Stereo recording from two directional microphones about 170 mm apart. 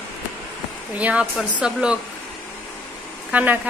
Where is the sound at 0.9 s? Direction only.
10° right (ahead or behind).